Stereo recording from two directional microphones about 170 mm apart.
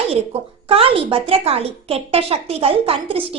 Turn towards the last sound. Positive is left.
turn(degrees=-35)  # may be behind; listen again after turning